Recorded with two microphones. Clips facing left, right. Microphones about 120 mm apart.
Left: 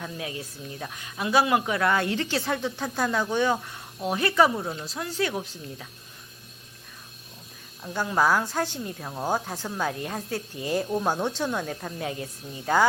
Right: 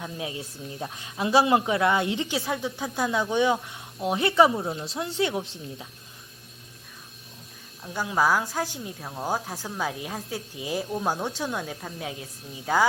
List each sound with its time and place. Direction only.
0.0 s speech: 25° right (ahead or behind)
2.3 s speech: 5° right (ahead or behind)
3.0 s speech: 20° right (ahead or behind)
7.9 s speech: 5° right (ahead or behind)